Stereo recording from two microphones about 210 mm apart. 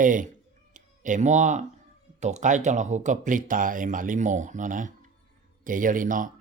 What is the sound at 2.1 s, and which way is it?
Speech, 35° right (ahead or behind).